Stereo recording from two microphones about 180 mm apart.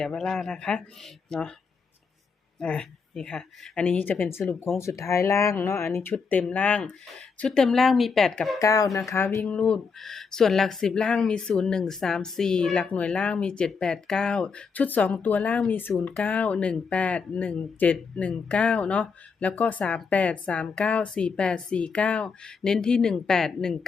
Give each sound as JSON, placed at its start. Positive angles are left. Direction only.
{"t": 0.0, "sound": "speech", "side_deg": 5}
{"t": 2.6, "sound": "speech", "side_deg": 5}
{"t": 8.5, "sound": "speech", "side_deg": 20}